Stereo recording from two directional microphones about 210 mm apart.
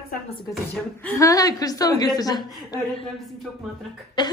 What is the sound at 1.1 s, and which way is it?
Speech, 15° left (ahead or behind).